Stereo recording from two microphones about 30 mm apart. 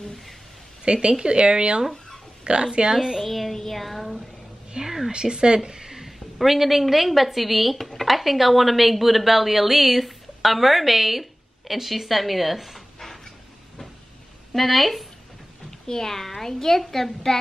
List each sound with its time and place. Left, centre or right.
0.8 s speech: right
2.9 s a woman's voice: centre
3.3 s child singing: centre
4.7 s a sound: right
5.1 s speech: right
6.0 s a woman's voice: centre
13.0 s a sound: centre
14.5 s a woman's voice: centre
15.9 s a child's voice: centre